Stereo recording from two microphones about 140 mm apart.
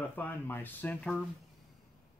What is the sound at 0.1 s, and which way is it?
Speech, 15° left (ahead or behind).